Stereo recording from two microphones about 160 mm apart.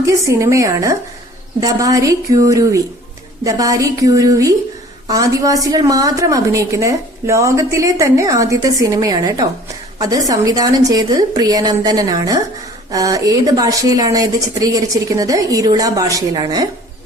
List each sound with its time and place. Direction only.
0.0 s a woman's voice: 20° right (ahead or behind)